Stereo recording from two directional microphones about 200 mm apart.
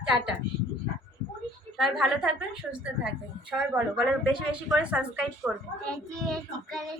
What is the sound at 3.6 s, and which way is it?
A woman's voice, 5° right (ahead or behind).